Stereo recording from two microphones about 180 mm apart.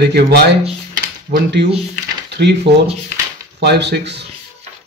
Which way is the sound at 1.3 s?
70° right (ahead or behind).